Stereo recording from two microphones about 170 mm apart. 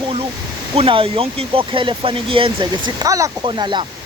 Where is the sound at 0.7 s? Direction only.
30° right (ahead or behind).